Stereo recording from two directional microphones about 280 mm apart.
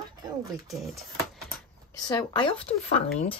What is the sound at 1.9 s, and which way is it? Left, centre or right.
Speech, centre.